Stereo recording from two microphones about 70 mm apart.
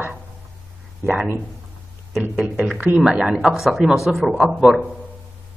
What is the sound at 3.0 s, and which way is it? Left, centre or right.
Speech, centre.